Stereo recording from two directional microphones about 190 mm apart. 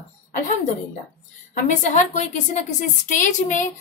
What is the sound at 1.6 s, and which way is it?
A woman's voice, 40° left (ahead or behind).